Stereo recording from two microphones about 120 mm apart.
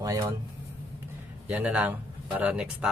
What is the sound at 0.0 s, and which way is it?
Speech, 25° right (ahead or behind).